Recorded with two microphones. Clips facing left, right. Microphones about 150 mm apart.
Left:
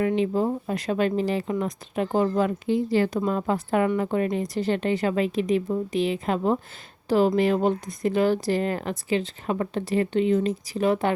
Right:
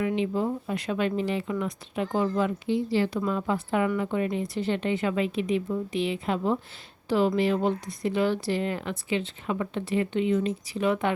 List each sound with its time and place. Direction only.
0.0 s speech: 40° left (ahead or behind)